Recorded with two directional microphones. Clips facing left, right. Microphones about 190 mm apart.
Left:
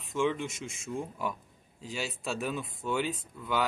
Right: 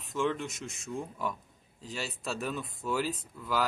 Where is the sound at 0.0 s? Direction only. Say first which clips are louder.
Left 2 dB; centre (ahead or behind).